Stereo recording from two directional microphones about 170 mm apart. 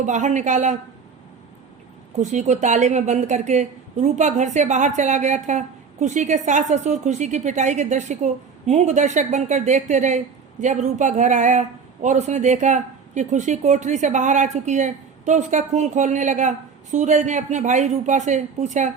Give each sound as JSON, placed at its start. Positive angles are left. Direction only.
{"t": 0.0, "sound": "a woman's voice", "side_deg": -45}
{"t": 2.1, "sound": "a woman's voice", "side_deg": -45}